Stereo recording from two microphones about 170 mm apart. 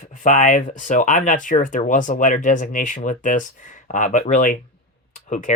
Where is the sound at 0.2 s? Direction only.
50° left (ahead or behind).